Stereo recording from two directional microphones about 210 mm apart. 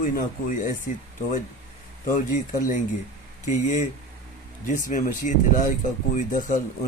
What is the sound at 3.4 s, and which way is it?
Speech, 35° left (ahead or behind).